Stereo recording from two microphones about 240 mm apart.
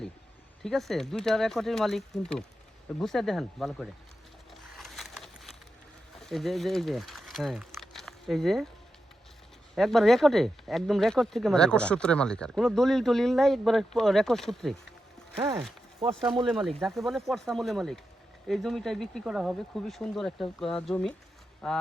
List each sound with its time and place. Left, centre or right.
0.6 s speech: centre
4.7 s a sound: centre
6.1 s speech: centre
9.7 s speech: centre
15.4 s speech: centre
16.5 s speech: centre